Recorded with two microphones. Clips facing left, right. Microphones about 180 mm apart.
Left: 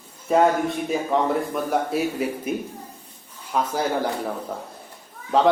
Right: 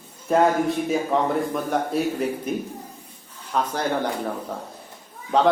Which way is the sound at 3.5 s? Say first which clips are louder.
Left 1 dB; 10° left (ahead or behind).